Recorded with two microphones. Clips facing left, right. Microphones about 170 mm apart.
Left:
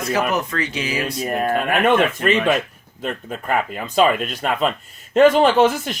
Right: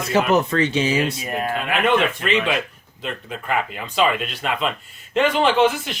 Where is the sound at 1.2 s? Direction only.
50° left (ahead or behind).